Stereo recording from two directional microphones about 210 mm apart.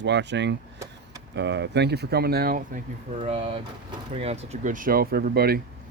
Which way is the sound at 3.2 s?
30° right (ahead or behind).